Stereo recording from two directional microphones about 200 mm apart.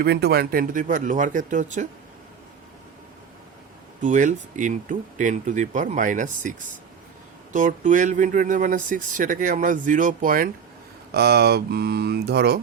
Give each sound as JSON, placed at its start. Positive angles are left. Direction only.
{"t": 0.0, "sound": "speech", "side_deg": -55}
{"t": 4.0, "sound": "speech", "side_deg": -40}
{"t": 7.5, "sound": "speech", "side_deg": -40}